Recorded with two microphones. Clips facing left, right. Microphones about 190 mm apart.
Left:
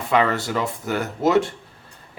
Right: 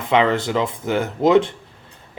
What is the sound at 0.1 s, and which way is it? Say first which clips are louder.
A man's voice: right 3 dB; 20° right (ahead or behind).